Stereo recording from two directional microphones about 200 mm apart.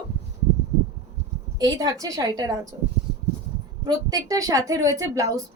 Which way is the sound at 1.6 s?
20° right (ahead or behind).